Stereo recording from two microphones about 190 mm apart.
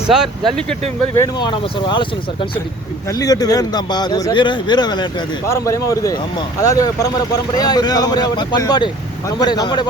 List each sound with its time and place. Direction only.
0.1 s speech: centre (ahead or behind)
1.2 s speech: 25° left (ahead or behind)